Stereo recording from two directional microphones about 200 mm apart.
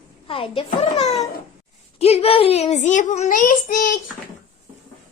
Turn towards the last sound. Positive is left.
turn(degrees=45)  # may be behind; listen again after turning